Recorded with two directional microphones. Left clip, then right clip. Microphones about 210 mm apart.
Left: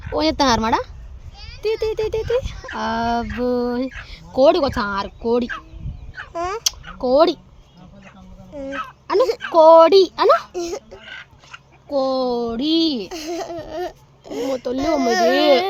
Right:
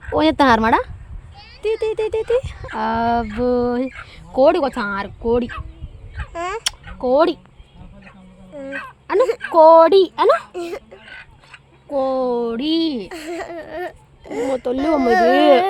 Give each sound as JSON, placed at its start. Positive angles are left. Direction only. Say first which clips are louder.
{"t": 0.0, "sound": "speech", "louder": "right 3 dB", "side_deg": -20}
{"t": 1.4, "sound": "speech", "louder": "right 1 dB", "side_deg": -5}
{"t": 6.1, "sound": "a sound", "louder": "even", "side_deg": -10}
{"t": 7.0, "sound": "speech", "louder": "even", "side_deg": -10}
{"t": 8.5, "sound": "speech", "louder": "left 1 dB", "side_deg": -5}
{"t": 9.6, "sound": "speech", "louder": "even", "side_deg": -15}
{"t": 11.9, "sound": "speech", "louder": "right 1 dB", "side_deg": -10}